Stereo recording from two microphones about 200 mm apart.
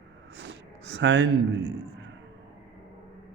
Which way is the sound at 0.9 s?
65° right (ahead or behind).